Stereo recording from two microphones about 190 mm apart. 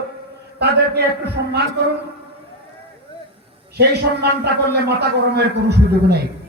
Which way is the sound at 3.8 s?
60° right (ahead or behind).